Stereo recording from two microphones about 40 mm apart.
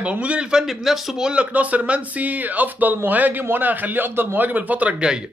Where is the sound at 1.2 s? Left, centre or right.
Right.